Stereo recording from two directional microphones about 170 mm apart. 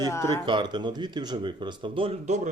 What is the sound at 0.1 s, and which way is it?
Speech, 15° left (ahead or behind).